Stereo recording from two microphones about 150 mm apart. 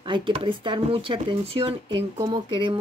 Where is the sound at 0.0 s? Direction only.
35° right (ahead or behind).